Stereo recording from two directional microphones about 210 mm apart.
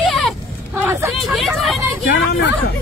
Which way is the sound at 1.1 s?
Centre (ahead or behind).